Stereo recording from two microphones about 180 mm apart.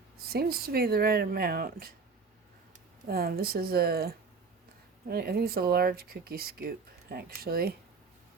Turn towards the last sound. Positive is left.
turn(degrees=-55)  # may be behind; listen again after turning